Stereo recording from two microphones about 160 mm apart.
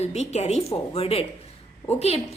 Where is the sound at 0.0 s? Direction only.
45° left (ahead or behind).